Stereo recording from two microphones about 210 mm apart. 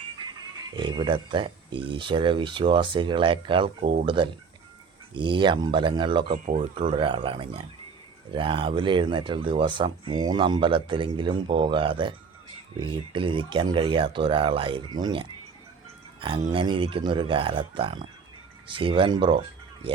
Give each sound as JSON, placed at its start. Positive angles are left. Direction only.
{"t": 0.5, "sound": "speech", "side_deg": -20}
{"t": 16.5, "sound": "speech", "side_deg": -25}